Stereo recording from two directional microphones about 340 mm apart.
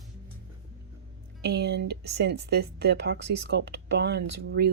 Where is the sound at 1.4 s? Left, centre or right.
Right.